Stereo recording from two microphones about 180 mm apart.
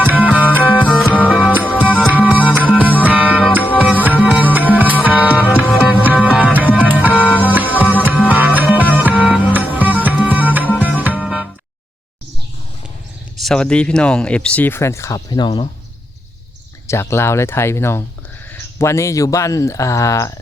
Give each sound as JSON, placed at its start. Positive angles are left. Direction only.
{"t": 0.0, "sound": "music", "side_deg": -10}
{"t": 0.9, "sound": "music", "side_deg": 5}
{"t": 2.2, "sound": "music", "side_deg": -5}
{"t": 3.4, "sound": "music", "side_deg": 10}
{"t": 3.8, "sound": "music", "side_deg": -10}
{"t": 7.1, "sound": "music", "side_deg": 10}
{"t": 7.5, "sound": "music", "side_deg": -10}
{"t": 13.3, "sound": "speech", "side_deg": 0}
{"t": 16.8, "sound": "speech", "side_deg": 15}